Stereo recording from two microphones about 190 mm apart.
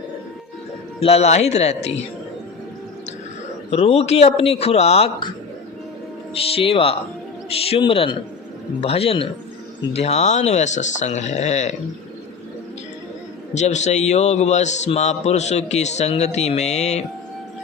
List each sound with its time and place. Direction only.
1.0 s a man's voice: 35° left (ahead or behind)
3.7 s a man's voice: 35° left (ahead or behind)
6.3 s a man's voice: 30° left (ahead or behind)
13.5 s a man's voice: 35° left (ahead or behind)